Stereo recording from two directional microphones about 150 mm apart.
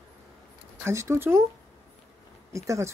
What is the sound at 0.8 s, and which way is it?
Speech, 20° right (ahead or behind).